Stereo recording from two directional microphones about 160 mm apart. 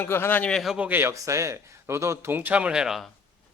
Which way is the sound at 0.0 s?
15° left (ahead or behind).